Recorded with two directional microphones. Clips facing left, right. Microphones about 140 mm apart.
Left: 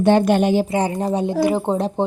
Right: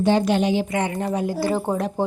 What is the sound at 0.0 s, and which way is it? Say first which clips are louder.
Speech: left 4 dB; 55° left (ahead or behind).